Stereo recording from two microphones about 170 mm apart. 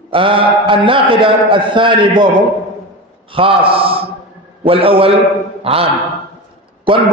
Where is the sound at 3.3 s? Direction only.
30° right (ahead or behind).